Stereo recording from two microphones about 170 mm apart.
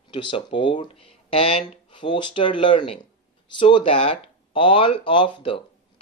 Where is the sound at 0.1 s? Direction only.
30° left (ahead or behind).